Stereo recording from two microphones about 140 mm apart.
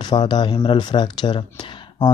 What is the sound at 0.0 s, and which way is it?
Speech, 30° left (ahead or behind).